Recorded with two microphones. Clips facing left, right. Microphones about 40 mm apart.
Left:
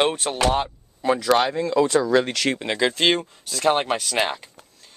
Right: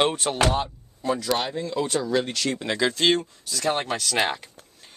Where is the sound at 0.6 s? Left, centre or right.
Left.